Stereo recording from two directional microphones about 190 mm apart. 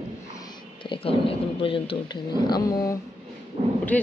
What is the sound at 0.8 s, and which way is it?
Speech, 30° left (ahead or behind).